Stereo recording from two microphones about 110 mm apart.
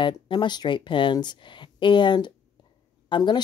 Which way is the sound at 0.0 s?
45° left (ahead or behind).